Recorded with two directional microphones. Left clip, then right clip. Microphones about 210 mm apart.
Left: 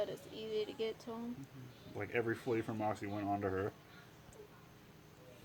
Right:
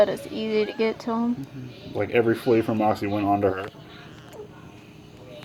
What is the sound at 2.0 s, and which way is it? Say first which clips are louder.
Speech: right 16 dB; centre (ahead or behind).